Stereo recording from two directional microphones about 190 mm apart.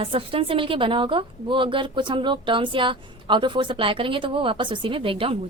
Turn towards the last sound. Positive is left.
turn(degrees=-30)  # may be behind; listen again after turning